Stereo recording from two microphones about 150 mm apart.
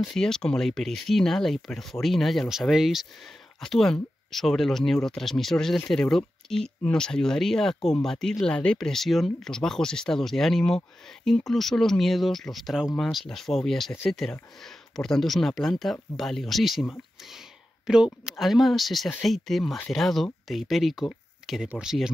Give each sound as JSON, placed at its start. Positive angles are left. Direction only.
{"t": 0.1, "sound": "speech", "side_deg": 5}
{"t": 17.2, "sound": "a sound", "side_deg": 0}
{"t": 18.4, "sound": "speech", "side_deg": 0}